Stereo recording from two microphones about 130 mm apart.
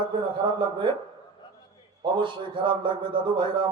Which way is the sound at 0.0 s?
40° right (ahead or behind).